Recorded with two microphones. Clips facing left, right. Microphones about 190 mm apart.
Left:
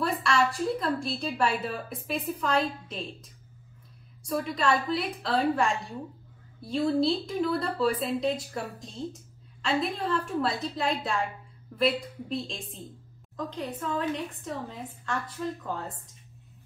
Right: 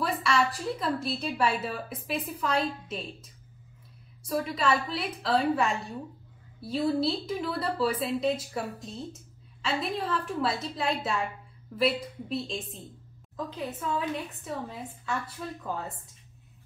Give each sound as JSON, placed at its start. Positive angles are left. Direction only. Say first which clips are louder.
{"t": 0.0, "sound": "a woman's voice", "louder": "left 1 dB", "side_deg": 0}
{"t": 4.3, "sound": "a woman's voice", "louder": "even", "side_deg": 0}